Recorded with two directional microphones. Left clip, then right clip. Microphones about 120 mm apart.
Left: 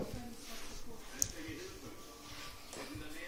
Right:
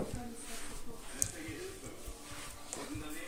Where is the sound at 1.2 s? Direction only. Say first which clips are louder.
Left 1 dB; 20° right (ahead or behind).